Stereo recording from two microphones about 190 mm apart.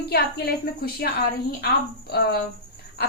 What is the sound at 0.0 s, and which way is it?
A woman's voice, 55° left (ahead or behind).